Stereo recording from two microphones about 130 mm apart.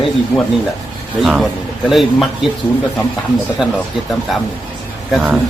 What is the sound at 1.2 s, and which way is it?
Speech, 5° right (ahead or behind).